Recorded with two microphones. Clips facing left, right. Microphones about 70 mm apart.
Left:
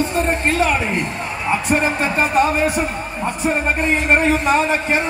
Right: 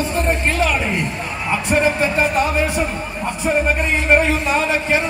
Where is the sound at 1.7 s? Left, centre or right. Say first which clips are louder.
Right 4 dB; left.